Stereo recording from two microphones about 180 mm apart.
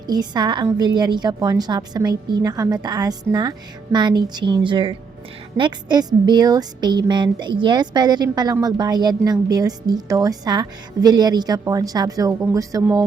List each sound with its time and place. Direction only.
0.1 s a woman's voice: 25° right (ahead or behind)